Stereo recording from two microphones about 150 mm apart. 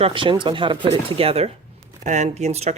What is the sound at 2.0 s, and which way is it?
Speech, 50° right (ahead or behind).